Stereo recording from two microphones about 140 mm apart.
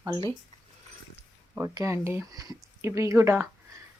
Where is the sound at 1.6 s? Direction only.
20° right (ahead or behind).